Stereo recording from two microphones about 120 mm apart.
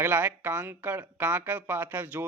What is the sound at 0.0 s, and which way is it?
Speech, 20° right (ahead or behind).